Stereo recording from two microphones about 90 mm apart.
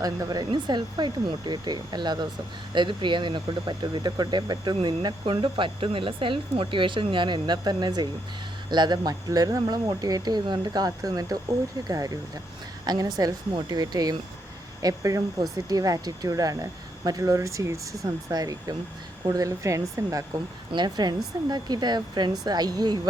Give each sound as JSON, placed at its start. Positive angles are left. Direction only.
{"t": 0.0, "sound": "speech", "side_deg": -45}
{"t": 5.2, "sound": "speech", "side_deg": -70}
{"t": 20.7, "sound": "speech", "side_deg": -50}